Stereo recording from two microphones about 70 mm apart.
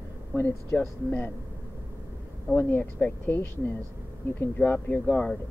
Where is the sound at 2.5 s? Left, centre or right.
Left.